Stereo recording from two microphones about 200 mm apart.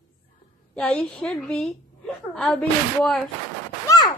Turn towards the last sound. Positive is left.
turn(degrees=20)  # may be behind; listen again after turning